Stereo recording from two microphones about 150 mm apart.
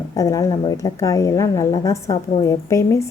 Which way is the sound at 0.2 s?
20° left (ahead or behind).